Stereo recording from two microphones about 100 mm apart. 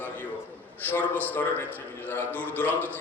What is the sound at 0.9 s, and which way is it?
A man's voice, 15° left (ahead or behind).